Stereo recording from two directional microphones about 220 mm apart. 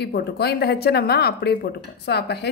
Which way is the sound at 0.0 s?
50° left (ahead or behind).